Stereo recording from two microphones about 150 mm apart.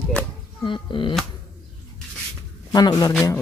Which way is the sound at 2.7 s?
25° left (ahead or behind).